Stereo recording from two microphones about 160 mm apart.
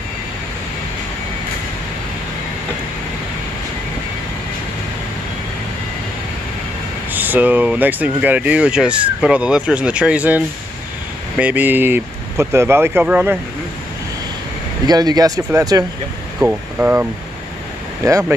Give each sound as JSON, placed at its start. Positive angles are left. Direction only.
{"t": 7.1, "sound": "speech", "side_deg": -10}
{"t": 14.9, "sound": "speech", "side_deg": -25}
{"t": 16.3, "sound": "speech", "side_deg": -10}